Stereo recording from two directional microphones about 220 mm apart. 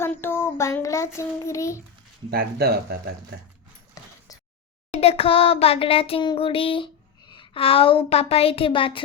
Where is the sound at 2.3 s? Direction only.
45° right (ahead or behind).